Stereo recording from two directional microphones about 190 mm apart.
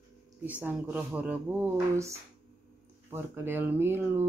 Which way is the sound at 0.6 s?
10° right (ahead or behind).